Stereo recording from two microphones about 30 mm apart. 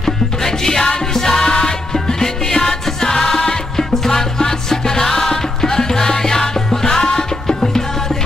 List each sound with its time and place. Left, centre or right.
0.0 s music: centre